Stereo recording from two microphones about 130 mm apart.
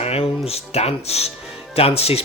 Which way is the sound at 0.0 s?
50° left (ahead or behind).